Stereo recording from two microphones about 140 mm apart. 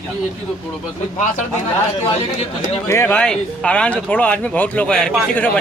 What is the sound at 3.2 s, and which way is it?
Speech, 10° left (ahead or behind).